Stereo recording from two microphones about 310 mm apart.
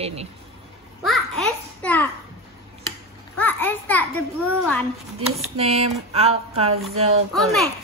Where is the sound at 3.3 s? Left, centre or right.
Centre.